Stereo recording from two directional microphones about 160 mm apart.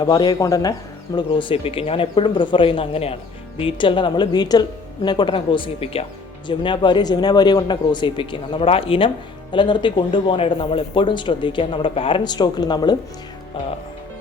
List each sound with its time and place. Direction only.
0.0 s a woman's voice: 25° left (ahead or behind)